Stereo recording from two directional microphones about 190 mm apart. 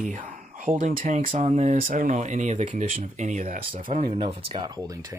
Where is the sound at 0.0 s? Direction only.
40° right (ahead or behind).